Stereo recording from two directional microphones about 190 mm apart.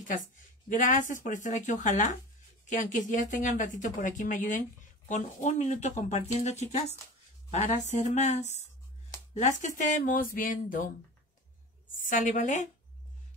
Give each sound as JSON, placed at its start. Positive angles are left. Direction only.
{"t": 0.7, "sound": "speech", "side_deg": 45}
{"t": 12.0, "sound": "speech", "side_deg": 40}